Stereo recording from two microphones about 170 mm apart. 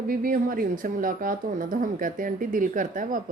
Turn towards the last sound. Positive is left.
turn(degrees=-50)  # may be behind; listen again after turning